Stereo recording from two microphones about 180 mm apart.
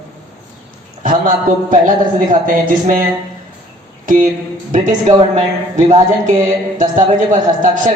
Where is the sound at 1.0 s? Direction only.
50° right (ahead or behind).